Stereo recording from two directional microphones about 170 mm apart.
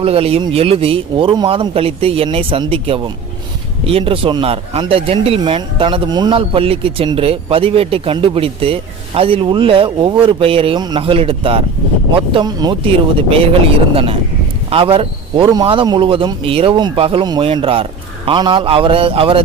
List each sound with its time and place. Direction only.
0.0 s speech: 35° right (ahead or behind)